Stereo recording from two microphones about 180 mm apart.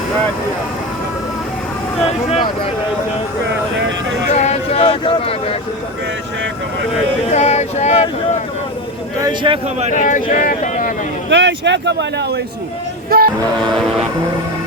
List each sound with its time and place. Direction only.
2.0 s speech: 35° left (ahead or behind)
4.3 s speech: 40° left (ahead or behind)
7.3 s speech: 40° left (ahead or behind)
9.2 s speech: 25° right (ahead or behind)
9.9 s speech: 45° left (ahead or behind)
11.3 s speech: 80° right
13.1 s music: 55° right (ahead or behind)